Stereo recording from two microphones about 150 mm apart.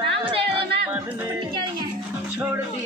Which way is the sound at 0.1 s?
35° right (ahead or behind).